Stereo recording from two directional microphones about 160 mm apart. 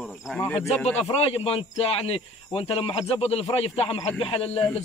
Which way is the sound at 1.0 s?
40° left (ahead or behind).